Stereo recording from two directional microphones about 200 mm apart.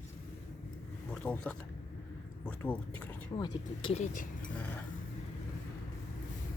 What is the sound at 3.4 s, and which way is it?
Speech, 25° left (ahead or behind).